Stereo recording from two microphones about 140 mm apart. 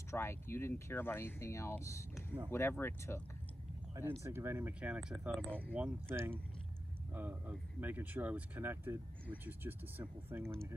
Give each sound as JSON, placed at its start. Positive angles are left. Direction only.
{"t": 0.1, "sound": "speech", "side_deg": 20}
{"t": 3.9, "sound": "speech", "side_deg": -20}
{"t": 5.7, "sound": "speech", "side_deg": -10}